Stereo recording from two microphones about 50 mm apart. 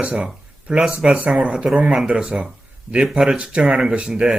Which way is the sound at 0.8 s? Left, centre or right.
Centre.